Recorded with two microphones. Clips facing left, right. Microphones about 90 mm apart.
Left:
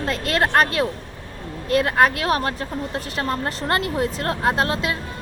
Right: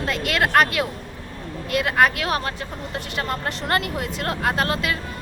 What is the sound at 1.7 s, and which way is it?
Speech, 35° left (ahead or behind).